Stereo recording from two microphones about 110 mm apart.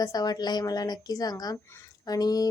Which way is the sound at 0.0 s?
35° left (ahead or behind).